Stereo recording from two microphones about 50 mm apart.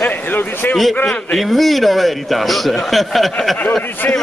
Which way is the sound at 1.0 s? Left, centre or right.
Centre.